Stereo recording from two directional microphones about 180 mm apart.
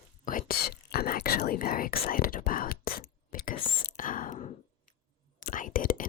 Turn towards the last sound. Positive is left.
turn(degrees=50)  # may be behind; listen again after turning